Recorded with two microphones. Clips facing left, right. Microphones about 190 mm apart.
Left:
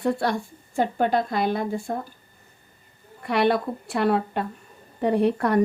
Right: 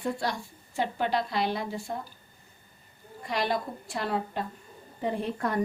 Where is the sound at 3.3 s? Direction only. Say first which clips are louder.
Left 8 dB; 65° left (ahead or behind).